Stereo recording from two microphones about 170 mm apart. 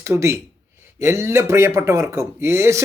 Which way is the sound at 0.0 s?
15° right (ahead or behind).